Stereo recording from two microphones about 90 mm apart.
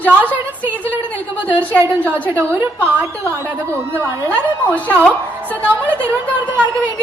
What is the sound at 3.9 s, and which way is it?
A man's voice, 15° left (ahead or behind).